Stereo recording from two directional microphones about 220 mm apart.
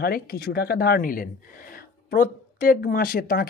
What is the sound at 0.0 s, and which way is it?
Speech, 45° left (ahead or behind).